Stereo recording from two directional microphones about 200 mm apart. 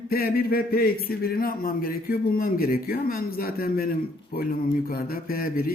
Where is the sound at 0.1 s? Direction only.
50° left (ahead or behind).